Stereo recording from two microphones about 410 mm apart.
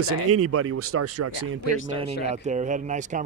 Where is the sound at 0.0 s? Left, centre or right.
Right.